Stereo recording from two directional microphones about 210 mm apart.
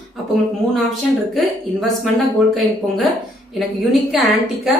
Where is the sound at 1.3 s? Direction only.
Centre (ahead or behind).